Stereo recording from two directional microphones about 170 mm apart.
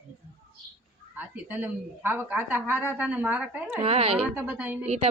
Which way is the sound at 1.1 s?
10° right (ahead or behind).